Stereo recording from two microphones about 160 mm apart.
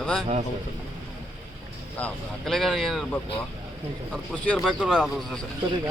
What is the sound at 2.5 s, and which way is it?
Speech, centre (ahead or behind).